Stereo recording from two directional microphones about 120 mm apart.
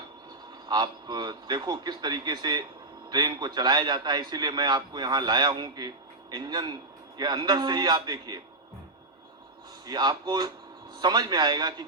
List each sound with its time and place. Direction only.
0.7 s a man's voice: 35° right (ahead or behind)
9.8 s a man's voice: 35° right (ahead or behind)